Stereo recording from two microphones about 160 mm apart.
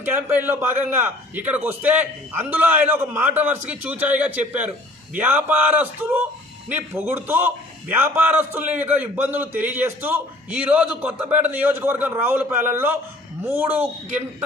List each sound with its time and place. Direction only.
0.0 s a man's voice: 15° right (ahead or behind)